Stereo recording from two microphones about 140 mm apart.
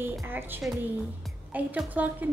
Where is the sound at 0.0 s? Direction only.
15° right (ahead or behind).